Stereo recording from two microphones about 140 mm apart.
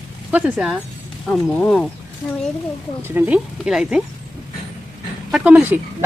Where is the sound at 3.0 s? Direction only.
15° right (ahead or behind).